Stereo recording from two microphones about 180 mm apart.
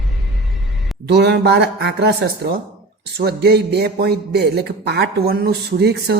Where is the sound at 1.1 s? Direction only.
65° right (ahead or behind).